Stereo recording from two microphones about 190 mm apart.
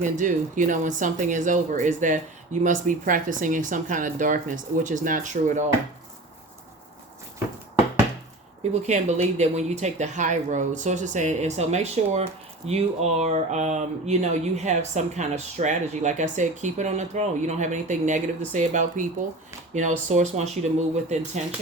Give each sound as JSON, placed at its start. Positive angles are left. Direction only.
{"t": 0.0, "sound": "speech", "side_deg": -40}
{"t": 8.7, "sound": "speech", "side_deg": -35}